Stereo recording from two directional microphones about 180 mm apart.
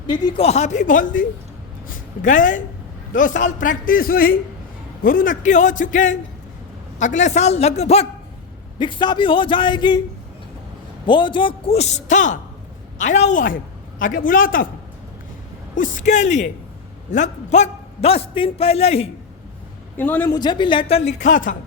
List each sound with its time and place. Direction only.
0.1 s a man's voice: 25° left (ahead or behind)
0.4 s a man's voice: 40° left (ahead or behind)
8.8 s a man's voice: 25° left (ahead or behind)
11.0 s a man's voice: 25° left (ahead or behind); by 14.7 s 50° left (ahead or behind)
15.7 s a man's voice: 45° left (ahead or behind)
20.0 s a man's voice: 10° left (ahead or behind)
20.3 s a man's voice: 25° left (ahead or behind); by 21.5 s 45° left (ahead or behind)